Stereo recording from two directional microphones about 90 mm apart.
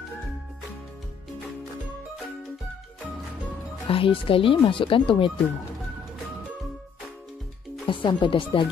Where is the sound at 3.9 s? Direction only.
85° left.